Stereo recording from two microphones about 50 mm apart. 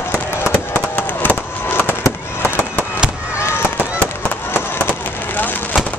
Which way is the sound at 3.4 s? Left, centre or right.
Left.